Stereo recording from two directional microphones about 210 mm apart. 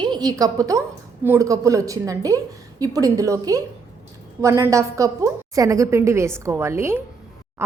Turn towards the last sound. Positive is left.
turn(degrees=-10)  # may be behind; listen again after turning